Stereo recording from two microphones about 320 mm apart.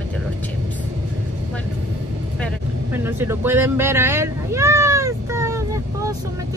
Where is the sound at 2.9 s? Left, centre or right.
Centre.